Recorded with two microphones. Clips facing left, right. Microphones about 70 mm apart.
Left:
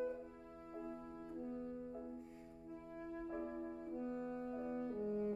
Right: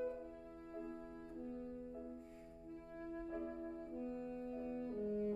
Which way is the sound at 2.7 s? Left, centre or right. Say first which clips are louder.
Even; centre.